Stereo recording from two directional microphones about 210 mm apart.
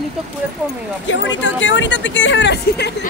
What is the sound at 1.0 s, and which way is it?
Speech, 60° left (ahead or behind).